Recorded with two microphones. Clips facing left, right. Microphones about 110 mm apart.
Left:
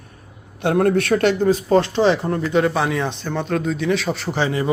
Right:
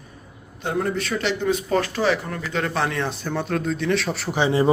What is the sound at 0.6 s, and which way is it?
Speech, 65° left (ahead or behind).